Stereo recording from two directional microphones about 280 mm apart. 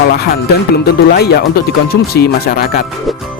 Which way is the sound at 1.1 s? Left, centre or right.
Left.